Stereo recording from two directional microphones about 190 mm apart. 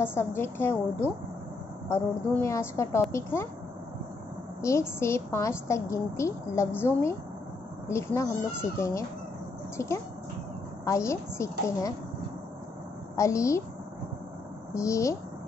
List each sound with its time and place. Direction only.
0.0 s a woman's voice: 10° left (ahead or behind)
1.9 s a woman's voice: 15° left (ahead or behind)
4.6 s a woman's voice: 15° left (ahead or behind)
13.1 s a woman's voice: 15° left (ahead or behind)
14.7 s a woman's voice: 15° left (ahead or behind)